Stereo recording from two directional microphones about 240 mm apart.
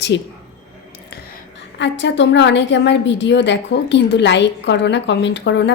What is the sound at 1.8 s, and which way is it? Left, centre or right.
A woman's voice, left.